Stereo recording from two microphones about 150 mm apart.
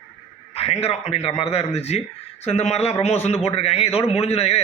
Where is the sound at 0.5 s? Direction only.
45° left (ahead or behind).